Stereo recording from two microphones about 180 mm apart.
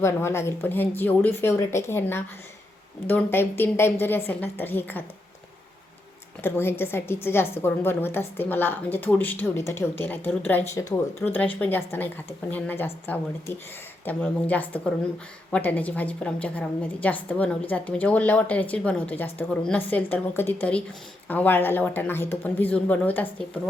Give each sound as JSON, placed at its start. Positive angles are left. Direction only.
{"t": 0.0, "sound": "a woman's voice", "side_deg": 15}
{"t": 6.4, "sound": "a woman's voice", "side_deg": 10}